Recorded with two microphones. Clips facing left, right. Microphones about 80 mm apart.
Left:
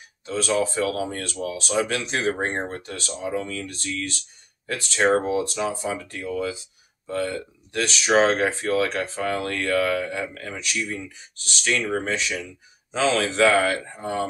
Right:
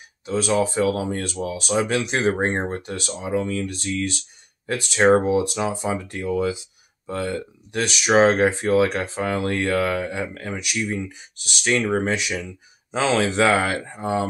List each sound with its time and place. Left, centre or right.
0.2 s speech: centre
11.6 s speech: right
12.1 s speech: centre
12.9 s speech: right